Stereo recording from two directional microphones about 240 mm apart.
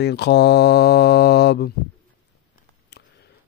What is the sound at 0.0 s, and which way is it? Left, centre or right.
Speech, left.